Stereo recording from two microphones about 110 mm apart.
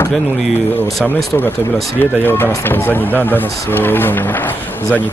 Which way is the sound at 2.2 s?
20° left (ahead or behind).